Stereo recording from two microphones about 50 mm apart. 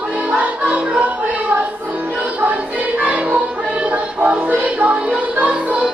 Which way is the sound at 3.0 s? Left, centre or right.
Right.